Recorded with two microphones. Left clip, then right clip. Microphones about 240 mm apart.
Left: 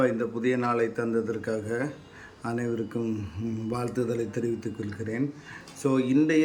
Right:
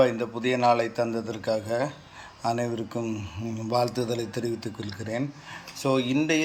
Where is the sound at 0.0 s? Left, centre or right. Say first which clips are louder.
Right 2 dB; centre.